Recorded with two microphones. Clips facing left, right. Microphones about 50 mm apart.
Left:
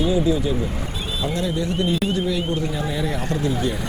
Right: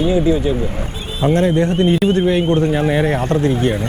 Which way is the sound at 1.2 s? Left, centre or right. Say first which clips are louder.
Right 10 dB; right.